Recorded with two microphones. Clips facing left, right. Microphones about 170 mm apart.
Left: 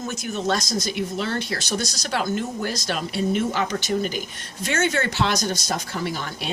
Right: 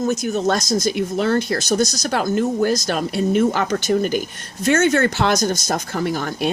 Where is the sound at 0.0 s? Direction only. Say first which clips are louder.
Right 7 dB; 40° right (ahead or behind).